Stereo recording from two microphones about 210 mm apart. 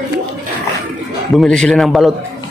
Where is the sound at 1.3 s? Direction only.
Centre (ahead or behind).